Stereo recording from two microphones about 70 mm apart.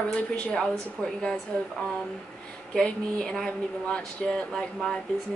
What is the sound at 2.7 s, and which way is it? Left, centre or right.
A woman's voice, centre.